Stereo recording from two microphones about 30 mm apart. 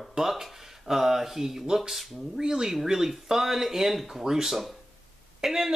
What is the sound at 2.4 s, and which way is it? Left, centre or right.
Speech, right.